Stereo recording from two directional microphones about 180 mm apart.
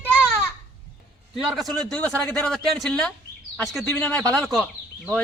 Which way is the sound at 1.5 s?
Centre (ahead or behind).